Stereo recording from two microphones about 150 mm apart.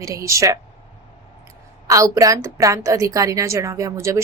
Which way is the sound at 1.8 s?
20° right (ahead or behind).